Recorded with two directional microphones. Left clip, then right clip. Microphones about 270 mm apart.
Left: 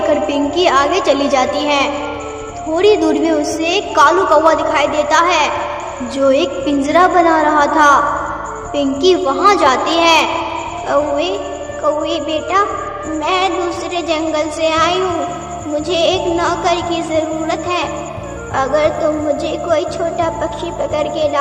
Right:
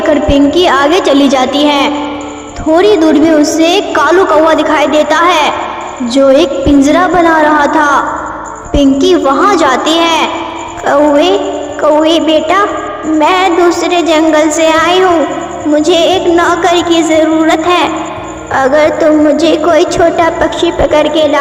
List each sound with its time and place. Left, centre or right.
0.1 s a woman's voice: right